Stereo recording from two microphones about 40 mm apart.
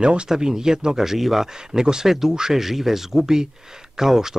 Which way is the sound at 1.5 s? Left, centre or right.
Centre.